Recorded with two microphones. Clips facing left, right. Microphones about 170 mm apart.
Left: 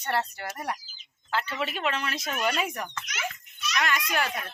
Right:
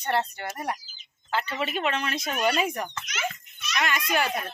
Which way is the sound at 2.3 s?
15° right (ahead or behind).